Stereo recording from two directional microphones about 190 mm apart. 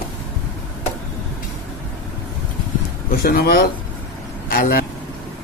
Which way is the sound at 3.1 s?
55° left (ahead or behind).